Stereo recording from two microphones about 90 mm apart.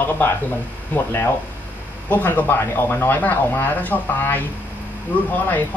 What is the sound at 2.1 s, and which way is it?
Speech, 20° left (ahead or behind).